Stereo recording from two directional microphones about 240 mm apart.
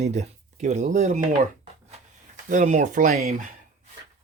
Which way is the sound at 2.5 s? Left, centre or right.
Right.